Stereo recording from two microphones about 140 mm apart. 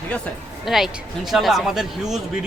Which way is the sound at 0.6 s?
Centre (ahead or behind).